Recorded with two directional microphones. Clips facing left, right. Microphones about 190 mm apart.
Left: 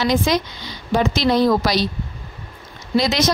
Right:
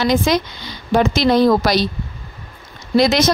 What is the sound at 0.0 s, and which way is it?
A woman's voice, 50° right (ahead or behind).